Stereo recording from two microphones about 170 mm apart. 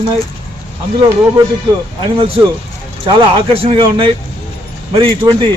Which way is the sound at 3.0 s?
30° right (ahead or behind).